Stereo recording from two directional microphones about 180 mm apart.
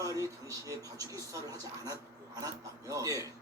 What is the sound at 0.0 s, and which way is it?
Speech, 20° right (ahead or behind).